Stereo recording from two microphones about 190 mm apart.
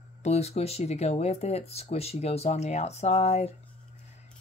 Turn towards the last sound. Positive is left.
turn(degrees=35)  # may be behind; listen again after turning